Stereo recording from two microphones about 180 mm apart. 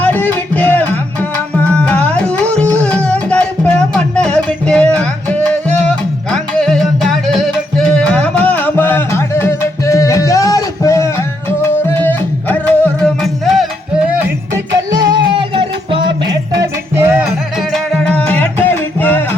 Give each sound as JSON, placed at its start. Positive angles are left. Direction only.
{"t": 0.0, "sound": "music", "side_deg": 10}
{"t": 14.2, "sound": "music", "side_deg": -15}
{"t": 16.9, "sound": "music", "side_deg": -15}
{"t": 17.6, "sound": "music", "side_deg": 5}